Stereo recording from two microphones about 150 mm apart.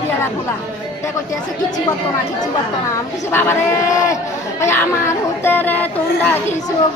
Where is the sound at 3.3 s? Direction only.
15° left (ahead or behind).